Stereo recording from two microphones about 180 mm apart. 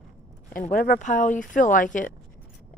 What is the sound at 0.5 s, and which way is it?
Speech, 50° left (ahead or behind).